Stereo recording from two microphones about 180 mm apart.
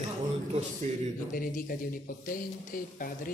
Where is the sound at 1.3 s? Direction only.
50° left (ahead or behind).